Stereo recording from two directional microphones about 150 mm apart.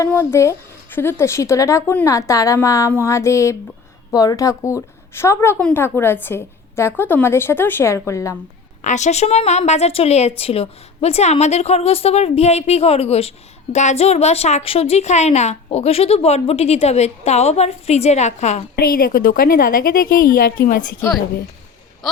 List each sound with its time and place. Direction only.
0.0 s a woman's voice: 15° left (ahead or behind)
8.8 s a woman's voice: 50° left (ahead or behind)
18.8 s a woman's voice: 75° left (ahead or behind)